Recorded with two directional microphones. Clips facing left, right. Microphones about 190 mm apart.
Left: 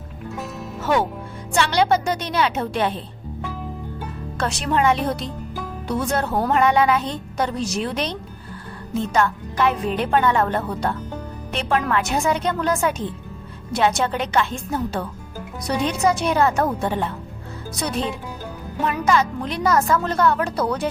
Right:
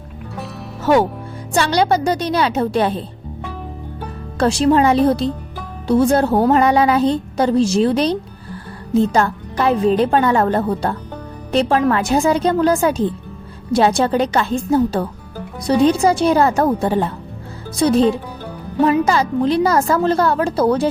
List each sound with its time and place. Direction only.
1.5 s a woman's voice: 40° right (ahead or behind)
4.4 s a woman's voice: 30° right (ahead or behind)